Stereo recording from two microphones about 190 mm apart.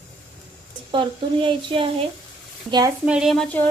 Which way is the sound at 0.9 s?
25° right (ahead or behind).